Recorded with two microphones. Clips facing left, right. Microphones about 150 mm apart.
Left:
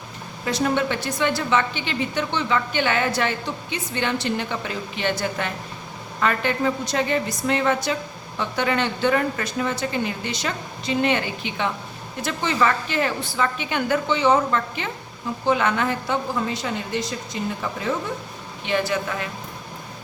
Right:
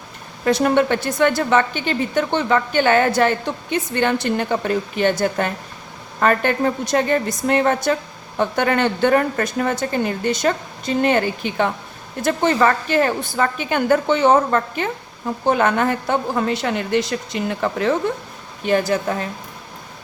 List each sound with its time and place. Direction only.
0.4 s a woman's voice: 55° right (ahead or behind)
18.6 s speech: 45° right (ahead or behind)